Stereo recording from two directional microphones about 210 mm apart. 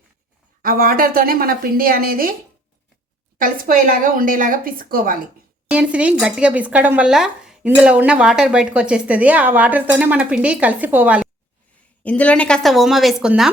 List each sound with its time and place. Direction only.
0.6 s a woman's voice: 45° right (ahead or behind)
3.3 s speech: 40° right (ahead or behind)
5.6 s speech: 5° right (ahead or behind)
12.0 s a woman's voice: 5° left (ahead or behind)